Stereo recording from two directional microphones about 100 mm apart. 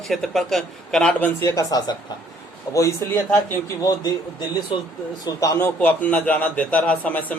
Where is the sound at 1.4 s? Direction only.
35° left (ahead or behind).